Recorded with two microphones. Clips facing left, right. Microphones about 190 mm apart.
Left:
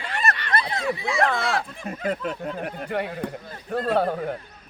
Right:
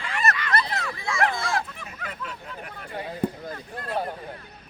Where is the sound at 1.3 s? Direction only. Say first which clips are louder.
Left 4 dB; 65° left (ahead or behind).